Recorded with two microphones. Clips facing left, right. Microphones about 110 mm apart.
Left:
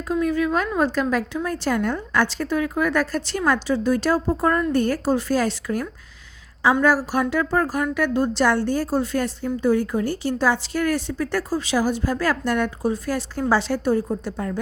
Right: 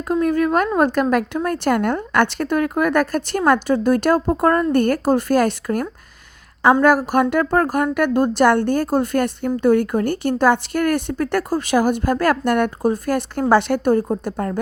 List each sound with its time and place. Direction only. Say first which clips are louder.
0.1 s a woman's voice: right 4 dB; 50° right (ahead or behind)
6.8 s a woman's voice: right 4 dB; 55° right (ahead or behind)